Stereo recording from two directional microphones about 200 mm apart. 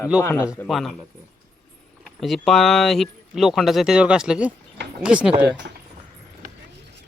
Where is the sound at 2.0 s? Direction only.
Centre (ahead or behind).